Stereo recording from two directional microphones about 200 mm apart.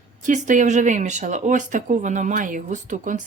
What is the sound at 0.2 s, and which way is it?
Speech, 40° right (ahead or behind).